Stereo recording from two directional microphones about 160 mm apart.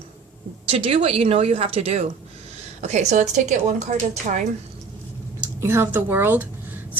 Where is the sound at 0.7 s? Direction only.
35° right (ahead or behind).